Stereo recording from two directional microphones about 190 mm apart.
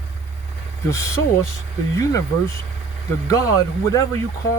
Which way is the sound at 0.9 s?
15° left (ahead or behind).